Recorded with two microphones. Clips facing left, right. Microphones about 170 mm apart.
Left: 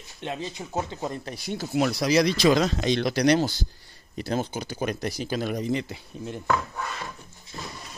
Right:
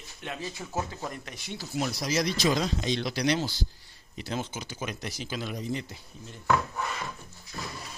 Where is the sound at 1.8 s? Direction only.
70° left (ahead or behind).